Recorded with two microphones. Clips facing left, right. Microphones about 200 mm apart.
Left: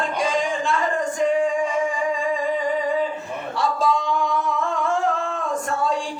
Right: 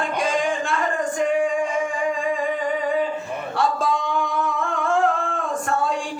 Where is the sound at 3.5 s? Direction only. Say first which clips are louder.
Left 1 dB; 55° right (ahead or behind).